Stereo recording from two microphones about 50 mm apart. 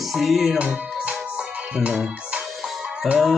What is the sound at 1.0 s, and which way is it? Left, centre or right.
Music, right.